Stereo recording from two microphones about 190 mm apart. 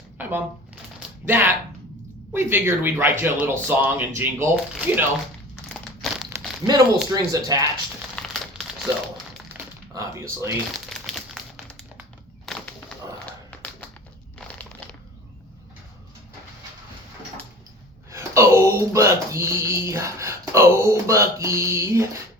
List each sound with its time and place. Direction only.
0.2 s speech: 10° right (ahead or behind)
5.6 s crumpling: 5° left (ahead or behind)
6.3 s crumpling: 20° right (ahead or behind)
7.1 s speech: 20° right (ahead or behind)
8.1 s crumpling: centre (ahead or behind)
9.5 s typing: 15° right (ahead or behind)
10.8 s crumpling: centre (ahead or behind)
12.5 s a sound: centre (ahead or behind)
14.3 s crumpling: 5° left (ahead or behind)
18.1 s speech: 15° right (ahead or behind)